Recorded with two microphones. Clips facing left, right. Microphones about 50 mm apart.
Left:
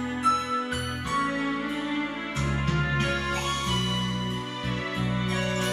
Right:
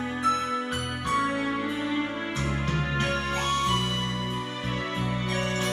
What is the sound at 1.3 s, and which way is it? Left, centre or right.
Music, right.